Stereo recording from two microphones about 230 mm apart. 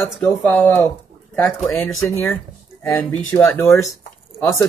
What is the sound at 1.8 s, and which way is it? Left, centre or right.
Speech, centre.